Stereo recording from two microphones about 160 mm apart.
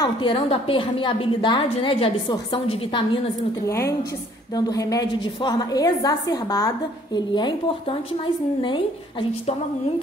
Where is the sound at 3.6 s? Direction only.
20° left (ahead or behind).